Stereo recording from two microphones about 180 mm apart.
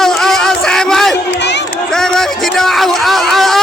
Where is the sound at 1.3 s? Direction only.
75° left (ahead or behind).